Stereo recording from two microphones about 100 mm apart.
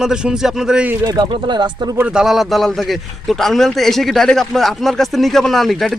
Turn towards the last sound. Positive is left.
turn(degrees=0)  # may be behind; listen again after turning